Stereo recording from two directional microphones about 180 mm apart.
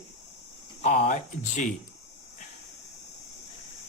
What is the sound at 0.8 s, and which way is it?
Speech, 45° left (ahead or behind).